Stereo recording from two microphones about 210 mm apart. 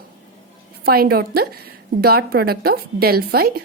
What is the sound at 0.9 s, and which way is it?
A woman's voice, 45° right (ahead or behind).